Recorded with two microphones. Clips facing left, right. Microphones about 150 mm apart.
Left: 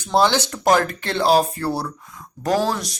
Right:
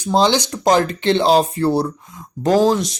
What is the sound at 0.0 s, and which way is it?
Speech, 15° right (ahead or behind).